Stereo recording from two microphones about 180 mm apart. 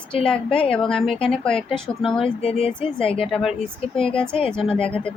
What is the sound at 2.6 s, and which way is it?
Speech, 30° left (ahead or behind).